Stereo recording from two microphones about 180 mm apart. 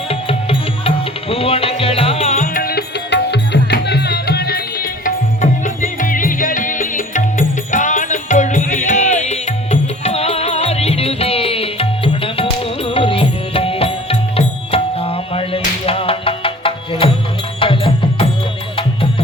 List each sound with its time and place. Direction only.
0.1 s music: 30° left (ahead or behind)